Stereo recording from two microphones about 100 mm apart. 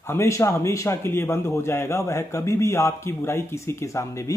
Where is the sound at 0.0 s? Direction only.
25° left (ahead or behind).